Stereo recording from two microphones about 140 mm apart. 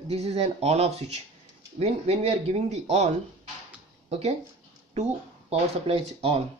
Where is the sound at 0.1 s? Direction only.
45° right (ahead or behind).